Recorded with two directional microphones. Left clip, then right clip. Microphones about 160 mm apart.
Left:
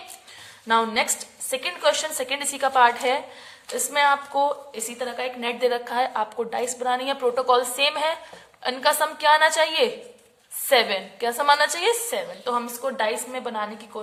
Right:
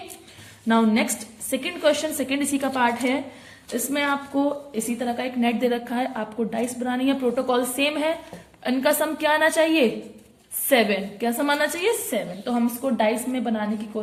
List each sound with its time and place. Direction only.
0.7 s a woman's voice: 30° left (ahead or behind)